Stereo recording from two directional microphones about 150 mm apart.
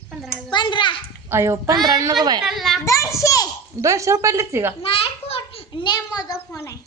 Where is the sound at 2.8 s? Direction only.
20° left (ahead or behind).